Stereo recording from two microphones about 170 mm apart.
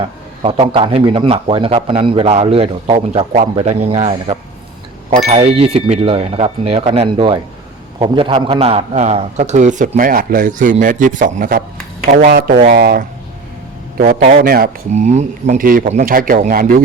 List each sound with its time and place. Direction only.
0.0 s a man's voice: 35° right (ahead or behind); by 11.6 s 55° right (ahead or behind)
12.7 s speech: 55° right (ahead or behind)
14.2 s a man's voice: 40° right (ahead or behind)
14.4 s speech: 60° right (ahead or behind)
14.9 s a man's voice: 40° right (ahead or behind); by 16.8 s 60° right (ahead or behind)